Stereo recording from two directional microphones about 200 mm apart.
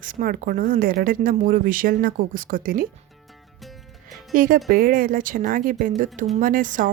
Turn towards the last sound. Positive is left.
turn(degrees=-40)  # may be behind; listen again after turning